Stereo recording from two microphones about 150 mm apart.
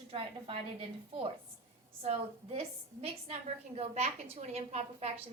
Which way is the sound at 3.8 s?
45° right (ahead or behind).